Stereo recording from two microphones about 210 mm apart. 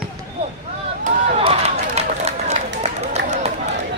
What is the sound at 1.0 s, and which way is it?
Run, 30° right (ahead or behind).